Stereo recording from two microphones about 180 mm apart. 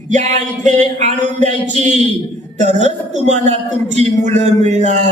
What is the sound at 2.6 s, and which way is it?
Speech, 40° right (ahead or behind).